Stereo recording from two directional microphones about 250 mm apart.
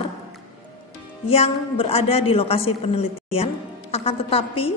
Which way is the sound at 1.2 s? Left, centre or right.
Left.